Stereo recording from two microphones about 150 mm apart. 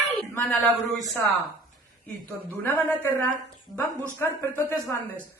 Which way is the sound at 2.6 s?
15° left (ahead or behind).